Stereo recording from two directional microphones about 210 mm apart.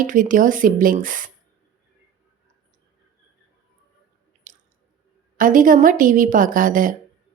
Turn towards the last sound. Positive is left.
turn(degrees=-40)  # may be behind; listen again after turning